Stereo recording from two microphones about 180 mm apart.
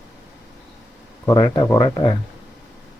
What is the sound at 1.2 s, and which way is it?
Speech, 20° left (ahead or behind).